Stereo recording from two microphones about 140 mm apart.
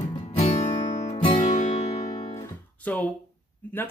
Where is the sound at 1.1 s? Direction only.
40° left (ahead or behind).